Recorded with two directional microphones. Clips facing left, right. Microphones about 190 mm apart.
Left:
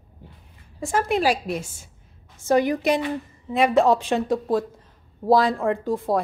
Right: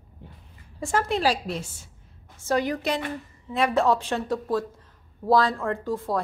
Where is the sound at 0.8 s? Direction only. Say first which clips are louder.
Left 2 dB; 10° left (ahead or behind).